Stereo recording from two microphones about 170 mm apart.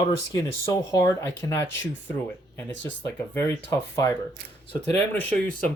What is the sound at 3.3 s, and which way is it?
Speech, 15° left (ahead or behind).